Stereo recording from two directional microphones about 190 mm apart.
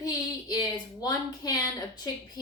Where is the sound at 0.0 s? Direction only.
20° left (ahead or behind).